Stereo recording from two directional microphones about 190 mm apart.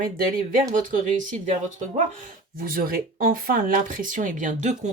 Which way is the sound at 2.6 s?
50° right (ahead or behind).